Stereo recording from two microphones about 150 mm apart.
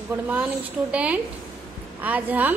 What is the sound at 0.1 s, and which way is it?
A woman's voice, 10° right (ahead or behind).